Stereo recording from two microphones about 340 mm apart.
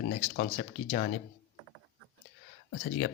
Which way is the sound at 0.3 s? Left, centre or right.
Left.